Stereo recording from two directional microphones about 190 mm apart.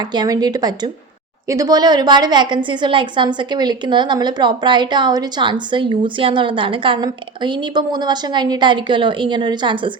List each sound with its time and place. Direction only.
0.1 s a woman's voice: 20° right (ahead or behind)